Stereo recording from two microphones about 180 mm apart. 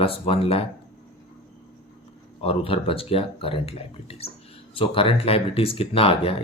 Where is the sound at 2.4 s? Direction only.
30° left (ahead or behind).